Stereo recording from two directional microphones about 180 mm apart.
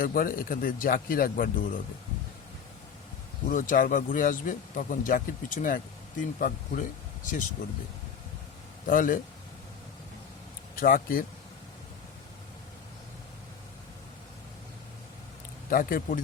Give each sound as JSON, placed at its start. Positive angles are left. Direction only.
{"t": 0.0, "sound": "speech", "side_deg": 50}
{"t": 3.5, "sound": "speech", "side_deg": 50}
{"t": 8.9, "sound": "speech", "side_deg": 50}
{"t": 10.8, "sound": "speech", "side_deg": 50}
{"t": 15.7, "sound": "speech", "side_deg": 50}